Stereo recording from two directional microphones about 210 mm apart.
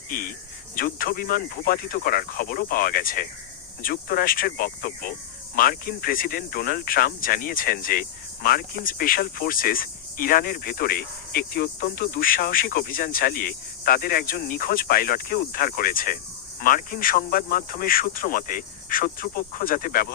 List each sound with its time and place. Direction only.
0.1 s speech: 40° left (ahead or behind)